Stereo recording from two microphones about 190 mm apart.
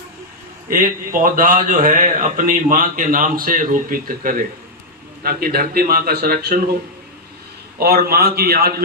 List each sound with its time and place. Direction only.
0.7 s a man's voice: 45° right (ahead or behind)
7.8 s a man's voice: 55° right (ahead or behind)